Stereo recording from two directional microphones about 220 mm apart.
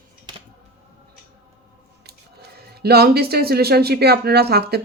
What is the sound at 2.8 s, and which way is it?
Speech, 45° right (ahead or behind).